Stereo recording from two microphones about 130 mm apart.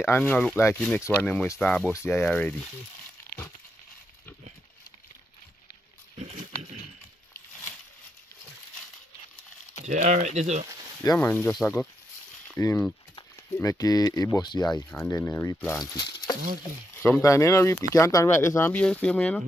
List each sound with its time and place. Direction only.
0.0 s speech: 15° left (ahead or behind)
6.1 s pig: 60° right (ahead or behind)
9.8 s speech: 65° right (ahead or behind)
11.1 s speech: 15° left (ahead or behind)
12.5 s speech: 25° left (ahead or behind)
14.9 s speech: 20° left (ahead or behind)
15.8 s speech: 30° left (ahead or behind)
16.9 s speech: 20° left (ahead or behind)